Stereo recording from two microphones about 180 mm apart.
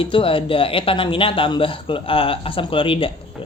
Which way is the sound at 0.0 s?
30° left (ahead or behind).